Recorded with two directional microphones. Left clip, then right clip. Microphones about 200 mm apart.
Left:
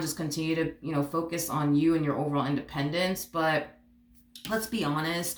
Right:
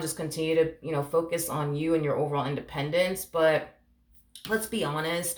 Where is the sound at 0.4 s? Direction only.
40° right (ahead or behind).